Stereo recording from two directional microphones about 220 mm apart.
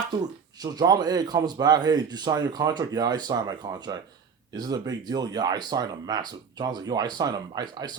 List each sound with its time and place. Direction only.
0.2 s speech: 15° right (ahead or behind)